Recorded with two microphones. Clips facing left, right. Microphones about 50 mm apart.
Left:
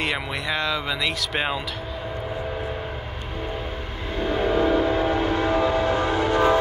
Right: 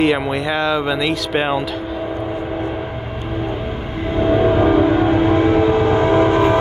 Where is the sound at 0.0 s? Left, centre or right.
Centre.